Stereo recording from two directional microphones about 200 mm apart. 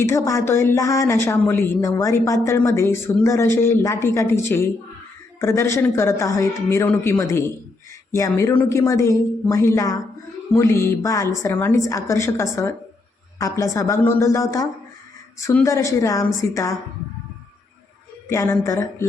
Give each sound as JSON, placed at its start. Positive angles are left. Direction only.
{"t": 0.0, "sound": "a woman's voice", "side_deg": 15}
{"t": 18.3, "sound": "a woman's voice", "side_deg": 15}